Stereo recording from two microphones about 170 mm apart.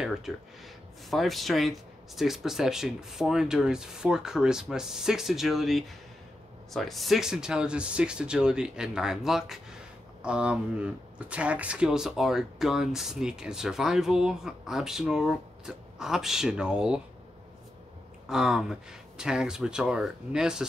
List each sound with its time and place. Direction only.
0.0 s speech: centre (ahead or behind)
18.3 s speech: centre (ahead or behind)